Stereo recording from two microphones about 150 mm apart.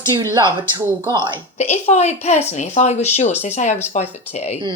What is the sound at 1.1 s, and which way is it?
Speech, 30° right (ahead or behind).